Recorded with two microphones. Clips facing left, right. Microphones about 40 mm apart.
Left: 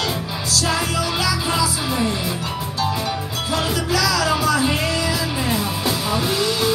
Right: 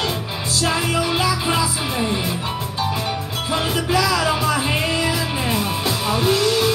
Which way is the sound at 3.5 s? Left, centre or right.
Right.